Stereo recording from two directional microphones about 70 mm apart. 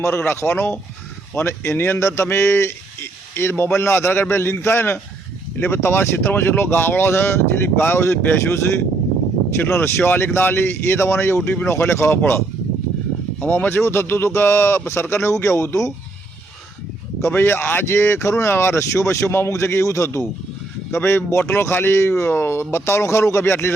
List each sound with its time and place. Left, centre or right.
0.0 s speech: left
13.4 s speech: left
17.2 s speech: left